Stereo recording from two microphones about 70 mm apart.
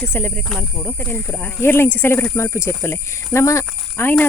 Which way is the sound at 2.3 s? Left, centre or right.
Left.